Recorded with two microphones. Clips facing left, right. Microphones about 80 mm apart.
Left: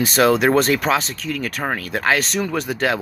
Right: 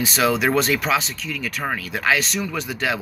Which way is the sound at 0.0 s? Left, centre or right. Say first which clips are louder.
Left 4 dB; left.